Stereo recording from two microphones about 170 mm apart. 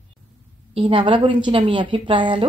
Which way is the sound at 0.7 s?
30° right (ahead or behind).